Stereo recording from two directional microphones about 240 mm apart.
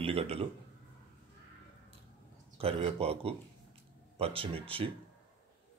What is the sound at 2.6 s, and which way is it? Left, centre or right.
Speech, right.